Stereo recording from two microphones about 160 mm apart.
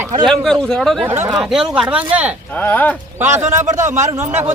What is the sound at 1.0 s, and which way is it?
Speech, 15° right (ahead or behind).